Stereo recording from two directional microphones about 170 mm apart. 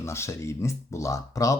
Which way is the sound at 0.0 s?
15° left (ahead or behind).